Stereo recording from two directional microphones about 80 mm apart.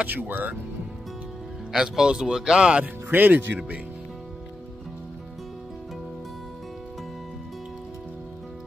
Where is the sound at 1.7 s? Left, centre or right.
Centre; by 3.7 s right.